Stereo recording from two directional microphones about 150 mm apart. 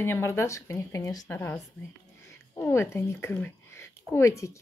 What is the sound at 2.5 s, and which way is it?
A woman's voice, 15° left (ahead or behind).